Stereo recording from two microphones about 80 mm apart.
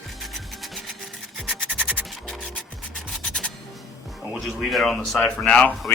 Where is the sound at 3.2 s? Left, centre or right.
Centre.